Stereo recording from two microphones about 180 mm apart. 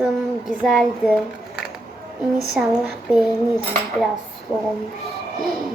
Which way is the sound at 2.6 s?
5° right (ahead or behind).